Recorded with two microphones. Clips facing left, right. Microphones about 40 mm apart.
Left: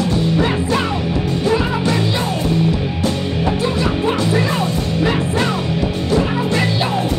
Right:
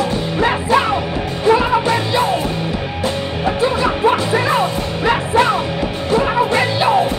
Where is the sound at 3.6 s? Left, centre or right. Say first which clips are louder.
Right 3 dB; right.